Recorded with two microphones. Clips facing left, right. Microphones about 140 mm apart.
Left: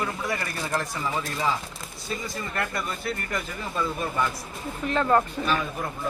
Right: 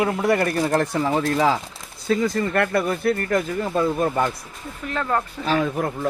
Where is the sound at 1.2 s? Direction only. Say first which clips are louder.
Right 7 dB; 90° right; by 4.2 s 45° right (ahead or behind).